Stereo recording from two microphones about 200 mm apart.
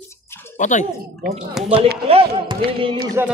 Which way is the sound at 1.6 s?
Centre (ahead or behind).